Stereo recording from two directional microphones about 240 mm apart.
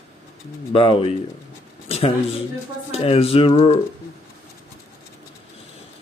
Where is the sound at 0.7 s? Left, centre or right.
Left.